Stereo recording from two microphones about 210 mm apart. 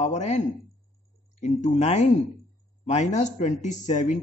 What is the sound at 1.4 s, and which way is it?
Speech, 35° left (ahead or behind).